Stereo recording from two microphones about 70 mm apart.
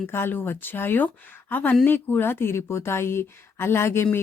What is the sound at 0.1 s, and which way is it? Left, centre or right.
Speech, left.